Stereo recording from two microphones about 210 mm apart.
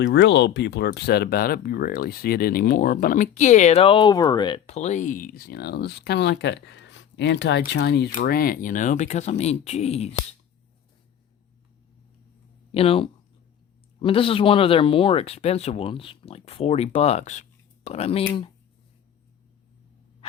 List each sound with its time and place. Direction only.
0.0 s speech: 55° left (ahead or behind); by 4.6 s 20° left (ahead or behind)
4.6 s speech: 35° left (ahead or behind)
12.7 s speech: 25° left (ahead or behind)